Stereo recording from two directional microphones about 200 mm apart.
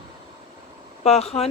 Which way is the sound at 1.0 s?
30° left (ahead or behind).